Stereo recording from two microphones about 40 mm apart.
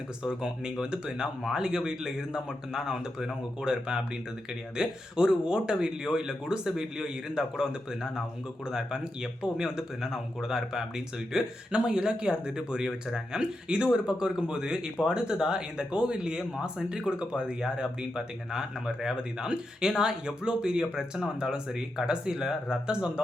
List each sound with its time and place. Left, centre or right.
0.2 s speech: centre
10.0 s speech: centre; by 23.2 s right